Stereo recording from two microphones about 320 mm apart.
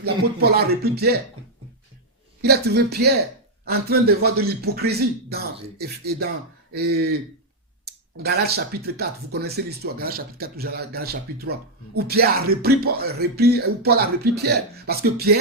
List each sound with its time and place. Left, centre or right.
0.0 s speech: right
2.4 s speech: right